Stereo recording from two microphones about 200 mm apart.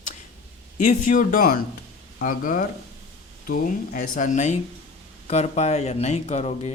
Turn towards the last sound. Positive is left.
turn(degrees=35)  # may be behind; listen again after turning